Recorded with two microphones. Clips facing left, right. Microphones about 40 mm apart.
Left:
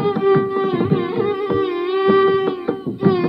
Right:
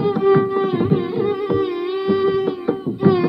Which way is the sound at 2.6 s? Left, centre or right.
Centre.